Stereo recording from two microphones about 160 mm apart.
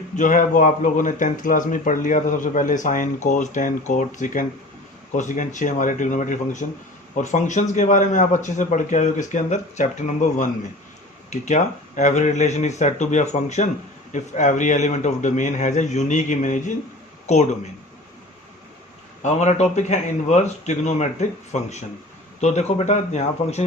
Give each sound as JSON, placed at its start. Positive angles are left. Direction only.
{"t": 0.2, "sound": "speech", "side_deg": 55}
{"t": 19.2, "sound": "speech", "side_deg": 45}